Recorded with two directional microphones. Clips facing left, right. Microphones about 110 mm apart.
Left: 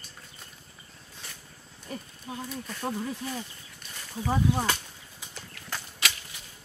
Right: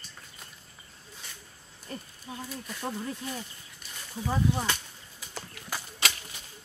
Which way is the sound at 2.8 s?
10° left (ahead or behind).